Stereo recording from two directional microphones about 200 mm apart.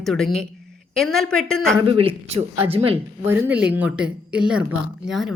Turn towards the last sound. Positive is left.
turn(degrees=0)  # may be behind; listen again after turning